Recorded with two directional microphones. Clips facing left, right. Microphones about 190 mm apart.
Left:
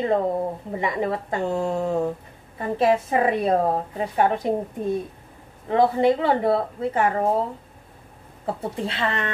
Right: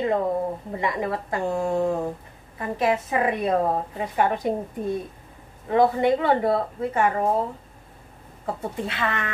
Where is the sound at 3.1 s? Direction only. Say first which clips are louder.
Left 2 dB; 35° left (ahead or behind).